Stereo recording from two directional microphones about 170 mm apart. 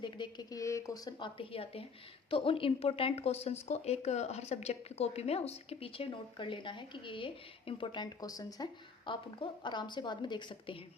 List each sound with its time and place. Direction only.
0.0 s a woman's voice: 25° left (ahead or behind)